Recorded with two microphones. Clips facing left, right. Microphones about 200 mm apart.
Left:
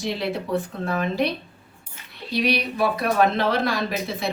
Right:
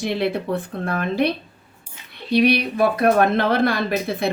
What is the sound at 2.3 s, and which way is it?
Speech, 60° right (ahead or behind).